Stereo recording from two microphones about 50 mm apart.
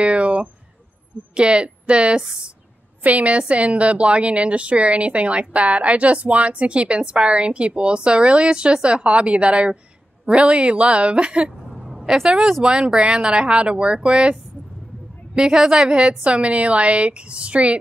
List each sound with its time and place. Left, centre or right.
0.0 s a sound: right
1.3 s a woman's voice: right
3.0 s a woman's voice: right
11.7 s a sound: centre
12.6 s a woman's voice: centre
15.3 s a woman's voice: centre